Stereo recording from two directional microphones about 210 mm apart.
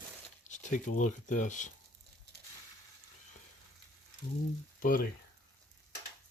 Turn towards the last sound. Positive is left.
turn(degrees=40)  # may be behind; listen again after turning